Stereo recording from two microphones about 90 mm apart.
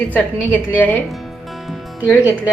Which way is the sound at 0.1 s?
20° left (ahead or behind).